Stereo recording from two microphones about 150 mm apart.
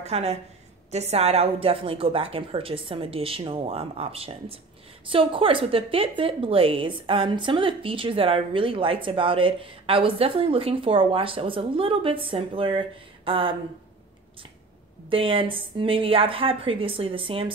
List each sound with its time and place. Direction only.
0.0 s a woman's voice: 45° right (ahead or behind)
15.0 s a woman's voice: 35° right (ahead or behind)